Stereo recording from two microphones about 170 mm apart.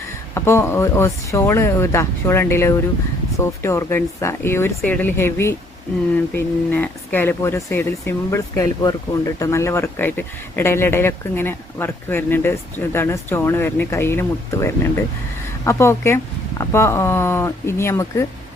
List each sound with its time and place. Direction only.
0.3 s speech: 15° left (ahead or behind)